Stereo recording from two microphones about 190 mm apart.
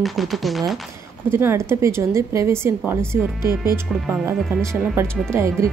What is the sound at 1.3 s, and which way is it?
Music, 15° right (ahead or behind).